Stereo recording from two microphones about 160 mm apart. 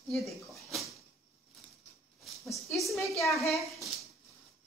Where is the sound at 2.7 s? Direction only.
Centre (ahead or behind).